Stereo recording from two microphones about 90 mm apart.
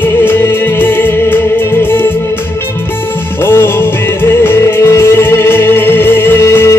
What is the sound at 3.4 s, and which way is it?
Music, 25° left (ahead or behind).